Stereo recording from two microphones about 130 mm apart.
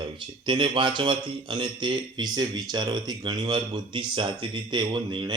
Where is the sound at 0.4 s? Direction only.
40° right (ahead or behind).